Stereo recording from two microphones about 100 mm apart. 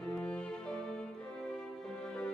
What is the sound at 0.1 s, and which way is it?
Music, 10° left (ahead or behind).